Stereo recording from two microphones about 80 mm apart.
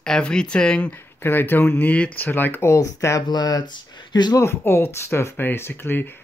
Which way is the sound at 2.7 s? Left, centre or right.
Left.